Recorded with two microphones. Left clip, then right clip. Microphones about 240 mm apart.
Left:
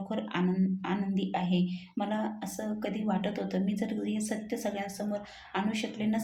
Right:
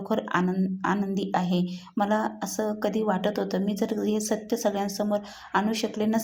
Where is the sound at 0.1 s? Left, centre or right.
Right.